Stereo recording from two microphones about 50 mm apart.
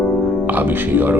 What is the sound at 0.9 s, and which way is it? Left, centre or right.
Speech, right.